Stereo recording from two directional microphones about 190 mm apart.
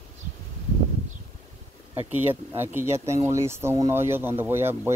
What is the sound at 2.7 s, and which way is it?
Speech, 15° right (ahead or behind).